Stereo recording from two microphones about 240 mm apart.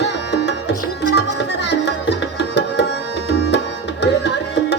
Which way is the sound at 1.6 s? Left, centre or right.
Left.